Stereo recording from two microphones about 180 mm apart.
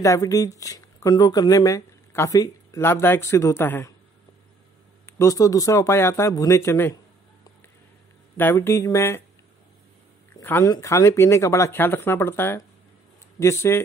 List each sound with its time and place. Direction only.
0.0 s speech: 15° left (ahead or behind)
5.0 s speech: 15° left (ahead or behind)
8.4 s speech: 10° left (ahead or behind)
10.4 s speech: 15° left (ahead or behind)